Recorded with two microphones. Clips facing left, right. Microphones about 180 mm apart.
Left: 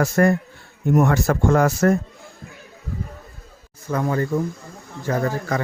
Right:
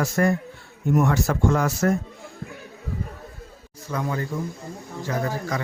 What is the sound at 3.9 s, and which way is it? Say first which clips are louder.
Speech: left 6 dB; 50° left (ahead or behind).